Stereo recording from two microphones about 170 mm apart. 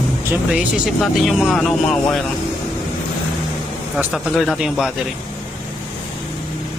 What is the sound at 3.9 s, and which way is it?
Speech, centre (ahead or behind).